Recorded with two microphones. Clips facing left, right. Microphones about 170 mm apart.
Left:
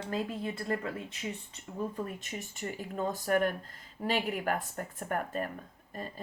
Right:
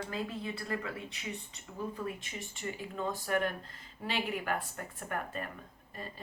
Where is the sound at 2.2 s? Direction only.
45° left (ahead or behind).